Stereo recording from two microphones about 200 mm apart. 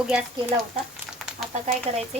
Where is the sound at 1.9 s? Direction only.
30° right (ahead or behind).